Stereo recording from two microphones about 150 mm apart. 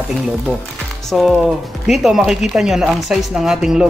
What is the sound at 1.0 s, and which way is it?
Speech, centre (ahead or behind).